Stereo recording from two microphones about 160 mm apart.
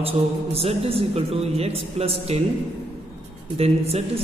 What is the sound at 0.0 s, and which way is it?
A man's voice, 40° right (ahead or behind).